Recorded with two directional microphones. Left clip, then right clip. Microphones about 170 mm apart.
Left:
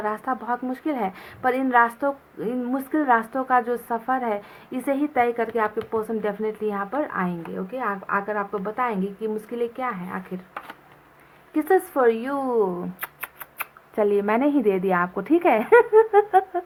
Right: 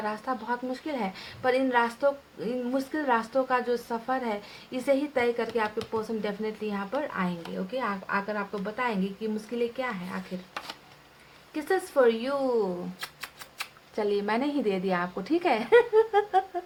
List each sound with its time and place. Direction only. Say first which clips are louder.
0.0 s a woman's voice: left 5 dB; 35° left (ahead or behind)
11.5 s a woman's voice: left 5 dB; 35° left (ahead or behind)